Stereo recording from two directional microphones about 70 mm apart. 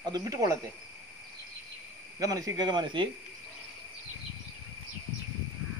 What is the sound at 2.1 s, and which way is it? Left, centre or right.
Speech, right.